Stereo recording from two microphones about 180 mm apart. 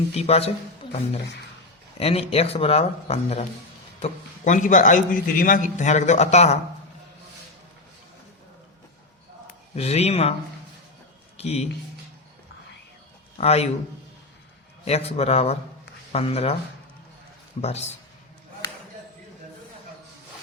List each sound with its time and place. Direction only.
0.2 s a man's voice: 35° left (ahead or behind)
2.0 s a man's voice: 35° left (ahead or behind)
9.7 s a man's voice: 35° left (ahead or behind)
11.3 s a man's voice: 35° left (ahead or behind)
13.4 s a man's voice: 35° left (ahead or behind)
14.8 s a man's voice: 35° left (ahead or behind)
17.6 s a man's voice: 35° left (ahead or behind)